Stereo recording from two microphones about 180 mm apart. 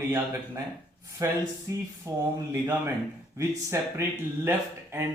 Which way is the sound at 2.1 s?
15° right (ahead or behind).